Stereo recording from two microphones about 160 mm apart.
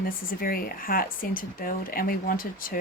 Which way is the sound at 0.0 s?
65° left (ahead or behind).